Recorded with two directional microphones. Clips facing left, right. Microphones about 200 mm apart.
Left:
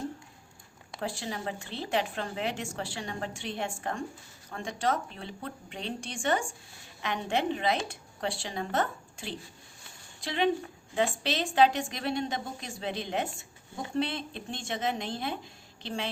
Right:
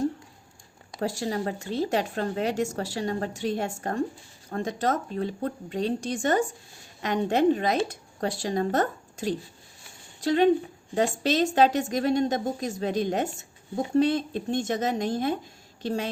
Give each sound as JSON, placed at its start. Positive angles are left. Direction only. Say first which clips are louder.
{"t": 0.9, "sound": "a woman's voice", "louder": "right 7 dB", "side_deg": -40}